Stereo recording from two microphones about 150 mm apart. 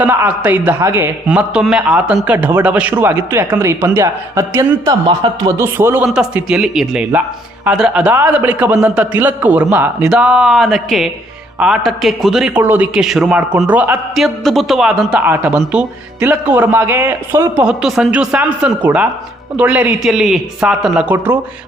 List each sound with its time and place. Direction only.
0.0 s a man's voice: 10° right (ahead or behind); by 5.5 s 30° right (ahead or behind)
5.5 s a man's voice: 15° right (ahead or behind)
15.2 s a man's voice: 15° right (ahead or behind)
17.7 s a man's voice: 5° right (ahead or behind)